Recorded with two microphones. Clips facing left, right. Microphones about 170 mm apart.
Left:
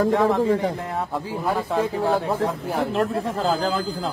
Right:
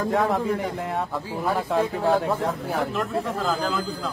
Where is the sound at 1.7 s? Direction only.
Centre (ahead or behind).